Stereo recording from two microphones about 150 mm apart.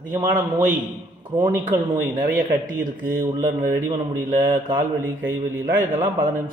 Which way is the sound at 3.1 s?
20° right (ahead or behind).